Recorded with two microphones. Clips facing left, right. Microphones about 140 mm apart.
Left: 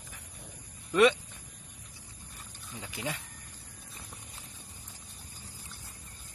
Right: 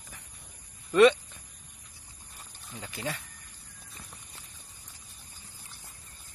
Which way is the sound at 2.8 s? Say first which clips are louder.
Right 1 dB; 15° left (ahead or behind).